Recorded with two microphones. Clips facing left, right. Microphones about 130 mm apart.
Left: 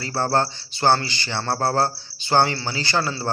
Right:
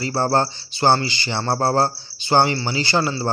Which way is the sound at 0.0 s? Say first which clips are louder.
Right 2 dB; 15° right (ahead or behind).